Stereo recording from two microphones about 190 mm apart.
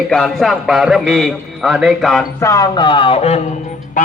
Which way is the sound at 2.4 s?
20° left (ahead or behind).